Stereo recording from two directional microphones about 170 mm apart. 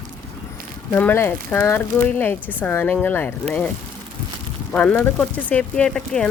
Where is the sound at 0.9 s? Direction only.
15° left (ahead or behind).